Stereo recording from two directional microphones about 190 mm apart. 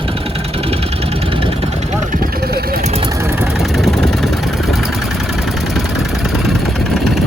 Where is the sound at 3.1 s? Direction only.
15° right (ahead or behind).